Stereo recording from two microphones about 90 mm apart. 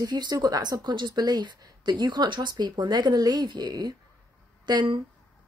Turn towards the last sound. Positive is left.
turn(degrees=-55)  # may be behind; listen again after turning